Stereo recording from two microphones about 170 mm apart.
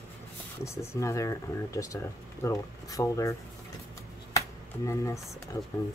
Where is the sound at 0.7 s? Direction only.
15° left (ahead or behind).